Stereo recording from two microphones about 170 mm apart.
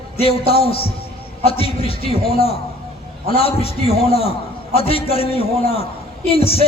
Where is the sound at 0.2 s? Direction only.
35° left (ahead or behind).